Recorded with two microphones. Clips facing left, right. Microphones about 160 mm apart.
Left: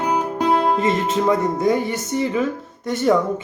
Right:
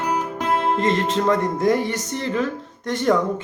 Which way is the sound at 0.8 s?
5° left (ahead or behind).